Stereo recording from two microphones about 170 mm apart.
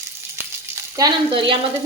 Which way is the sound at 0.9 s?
25° right (ahead or behind).